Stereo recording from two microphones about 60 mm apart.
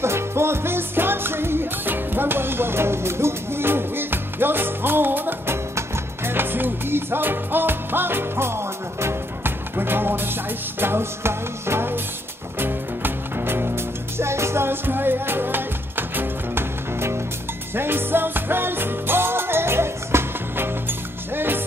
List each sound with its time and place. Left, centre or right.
0.0 s music: right